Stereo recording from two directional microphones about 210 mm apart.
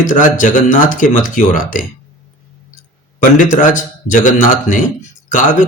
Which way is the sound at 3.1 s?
40° left (ahead or behind).